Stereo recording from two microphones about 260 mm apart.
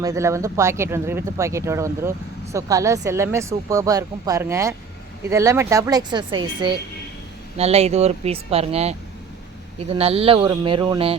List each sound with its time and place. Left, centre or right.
0.0 s speech: centre